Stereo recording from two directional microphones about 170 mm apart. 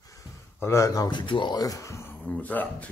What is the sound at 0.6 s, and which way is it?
Speech, 15° left (ahead or behind).